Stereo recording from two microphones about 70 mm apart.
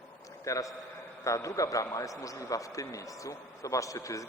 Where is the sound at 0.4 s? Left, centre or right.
Left.